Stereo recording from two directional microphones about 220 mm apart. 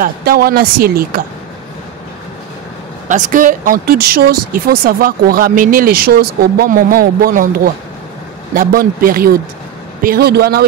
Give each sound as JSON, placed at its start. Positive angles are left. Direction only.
{"t": 0.0, "sound": "a woman's voice", "side_deg": -45}
{"t": 3.1, "sound": "a woman's voice", "side_deg": -35}